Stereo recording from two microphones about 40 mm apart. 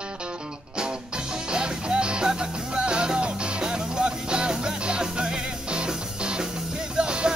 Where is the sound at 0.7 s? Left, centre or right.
Right.